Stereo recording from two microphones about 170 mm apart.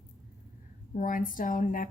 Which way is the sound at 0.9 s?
50° left (ahead or behind).